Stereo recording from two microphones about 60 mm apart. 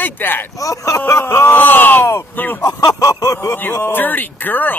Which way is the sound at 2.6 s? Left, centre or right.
Left.